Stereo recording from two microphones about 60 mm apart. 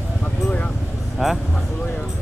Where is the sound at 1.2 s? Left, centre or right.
Centre.